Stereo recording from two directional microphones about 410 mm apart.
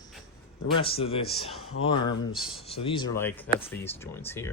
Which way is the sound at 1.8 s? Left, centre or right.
Left.